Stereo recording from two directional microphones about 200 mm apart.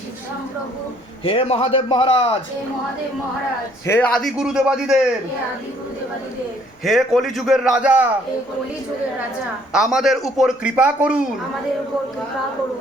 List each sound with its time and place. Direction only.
1.2 s a man's voice: 30° left (ahead or behind)
3.8 s speech: 10° left (ahead or behind)
6.8 s speech: centre (ahead or behind)
9.7 s speech: centre (ahead or behind)